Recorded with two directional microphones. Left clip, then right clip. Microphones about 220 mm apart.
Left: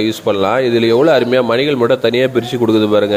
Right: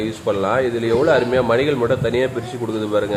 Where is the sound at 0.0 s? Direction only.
35° left (ahead or behind).